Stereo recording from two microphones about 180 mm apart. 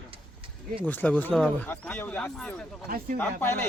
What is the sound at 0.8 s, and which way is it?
Speech, 10° left (ahead or behind).